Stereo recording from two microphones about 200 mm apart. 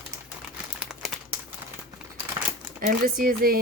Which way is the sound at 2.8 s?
45° right (ahead or behind).